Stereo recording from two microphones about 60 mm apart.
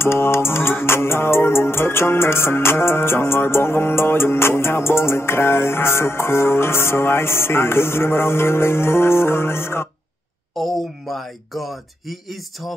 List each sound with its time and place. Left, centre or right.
0.0 s music: left
10.5 s speech: centre